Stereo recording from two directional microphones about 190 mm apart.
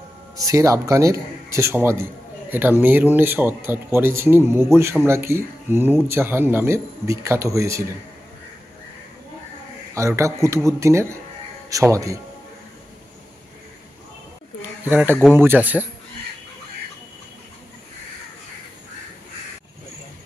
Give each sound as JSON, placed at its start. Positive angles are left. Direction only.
{"t": 0.4, "sound": "speech", "side_deg": -15}
{"t": 9.9, "sound": "speech", "side_deg": -15}
{"t": 14.9, "sound": "speech", "side_deg": -10}